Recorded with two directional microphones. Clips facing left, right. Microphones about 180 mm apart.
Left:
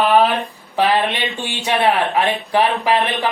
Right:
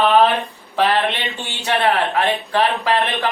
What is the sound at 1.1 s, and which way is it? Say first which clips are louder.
Speech: left 3 dB; 15° left (ahead or behind).